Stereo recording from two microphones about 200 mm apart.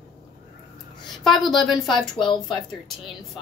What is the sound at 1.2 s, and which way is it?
Speech, centre (ahead or behind).